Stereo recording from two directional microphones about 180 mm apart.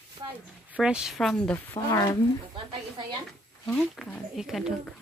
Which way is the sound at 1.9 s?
20° left (ahead or behind).